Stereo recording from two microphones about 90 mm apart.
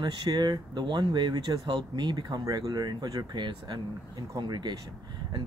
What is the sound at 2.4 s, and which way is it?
Speech, 40° right (ahead or behind).